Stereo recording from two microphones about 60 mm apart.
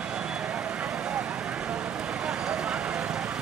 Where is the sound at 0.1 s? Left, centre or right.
Centre.